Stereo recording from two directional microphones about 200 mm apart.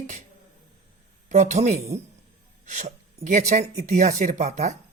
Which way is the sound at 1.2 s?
40° right (ahead or behind).